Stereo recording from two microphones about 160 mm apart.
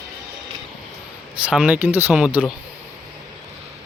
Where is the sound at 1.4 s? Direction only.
5° right (ahead or behind).